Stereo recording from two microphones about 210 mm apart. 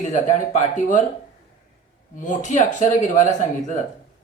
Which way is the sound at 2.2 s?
35° left (ahead or behind).